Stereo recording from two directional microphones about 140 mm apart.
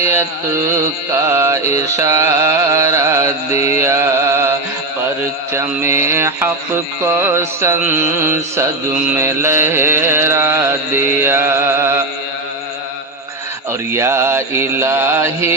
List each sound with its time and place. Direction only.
1.3 s music: 15° right (ahead or behind)
1.6 s music: 55° left (ahead or behind)
2.0 s mantra: 20° right (ahead or behind)
3.8 s music: 20° right (ahead or behind)
5.2 s mantra: 20° right (ahead or behind)
7.0 s music: 15° right (ahead or behind)
13.7 s mantra: 20° right (ahead or behind)